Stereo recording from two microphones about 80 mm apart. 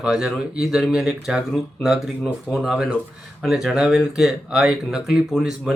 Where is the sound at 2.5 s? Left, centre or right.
Centre.